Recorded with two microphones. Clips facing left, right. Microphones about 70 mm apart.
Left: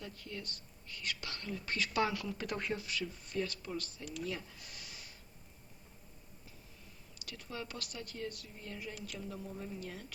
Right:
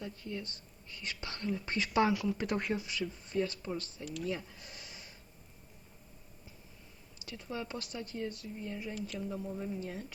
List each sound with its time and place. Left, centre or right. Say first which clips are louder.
0.0 s speech: right 4 dB; right
4.0 s speech: right 2 dB; centre
4.3 s a sound: right 4 dB; right
7.2 s speech: right 4 dB; right